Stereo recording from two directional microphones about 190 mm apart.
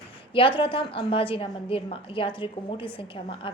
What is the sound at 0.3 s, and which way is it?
A woman's voice, 25° left (ahead or behind).